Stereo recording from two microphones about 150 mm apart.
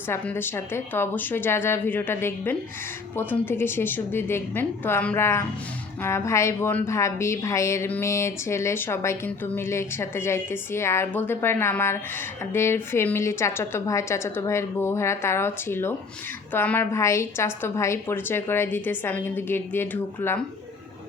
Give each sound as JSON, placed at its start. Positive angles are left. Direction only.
{"t": 0.1, "sound": "a woman's voice", "side_deg": 15}